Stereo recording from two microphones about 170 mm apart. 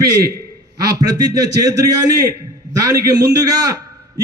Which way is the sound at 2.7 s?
20° right (ahead or behind).